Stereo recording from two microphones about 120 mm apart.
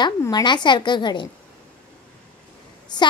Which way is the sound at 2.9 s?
35° left (ahead or behind).